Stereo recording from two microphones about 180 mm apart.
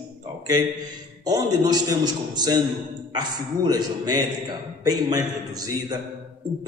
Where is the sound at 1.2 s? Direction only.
20° right (ahead or behind).